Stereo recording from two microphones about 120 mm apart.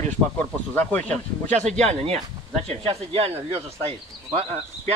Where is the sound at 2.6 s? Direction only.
55° right (ahead or behind).